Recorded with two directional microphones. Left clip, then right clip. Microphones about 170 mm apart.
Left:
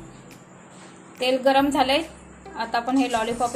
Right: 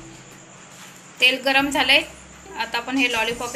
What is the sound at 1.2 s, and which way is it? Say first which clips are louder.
Speech: right 2 dB; 45° left (ahead or behind).